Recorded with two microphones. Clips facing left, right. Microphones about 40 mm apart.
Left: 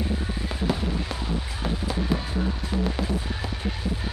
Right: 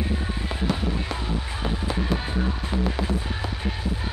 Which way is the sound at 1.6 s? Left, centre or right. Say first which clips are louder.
Right 1 dB; centre.